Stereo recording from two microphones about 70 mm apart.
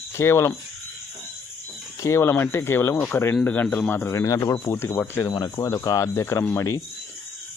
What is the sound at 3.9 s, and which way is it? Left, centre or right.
Speech, left.